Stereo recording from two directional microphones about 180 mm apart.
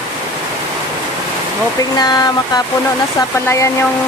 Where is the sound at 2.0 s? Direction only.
20° left (ahead or behind).